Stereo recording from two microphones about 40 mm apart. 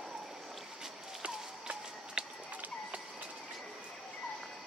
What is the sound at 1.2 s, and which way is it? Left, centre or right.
Walk, right.